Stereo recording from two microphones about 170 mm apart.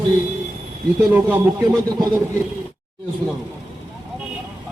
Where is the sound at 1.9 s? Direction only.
20° right (ahead or behind).